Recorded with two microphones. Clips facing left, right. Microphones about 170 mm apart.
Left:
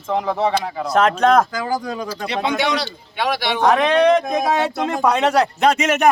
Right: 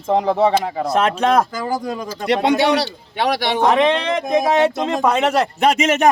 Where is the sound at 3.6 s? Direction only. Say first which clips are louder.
Right 1 dB; centre (ahead or behind).